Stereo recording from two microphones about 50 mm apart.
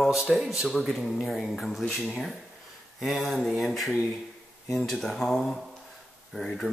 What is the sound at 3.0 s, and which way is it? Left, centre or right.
Speech, centre.